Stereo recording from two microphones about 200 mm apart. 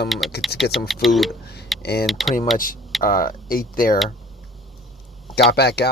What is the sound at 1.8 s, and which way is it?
Speech, 50° left (ahead or behind).